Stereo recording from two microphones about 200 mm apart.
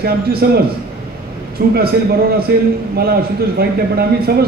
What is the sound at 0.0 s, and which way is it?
Speech, 50° right (ahead or behind).